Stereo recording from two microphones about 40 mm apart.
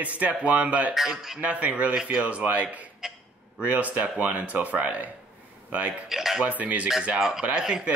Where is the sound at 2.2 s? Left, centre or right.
Right.